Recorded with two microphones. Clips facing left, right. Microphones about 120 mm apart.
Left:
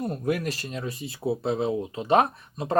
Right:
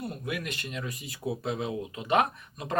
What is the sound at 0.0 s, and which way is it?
Speech, 40° left (ahead or behind).